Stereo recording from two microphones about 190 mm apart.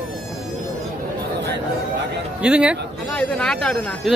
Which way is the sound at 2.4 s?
5° right (ahead or behind).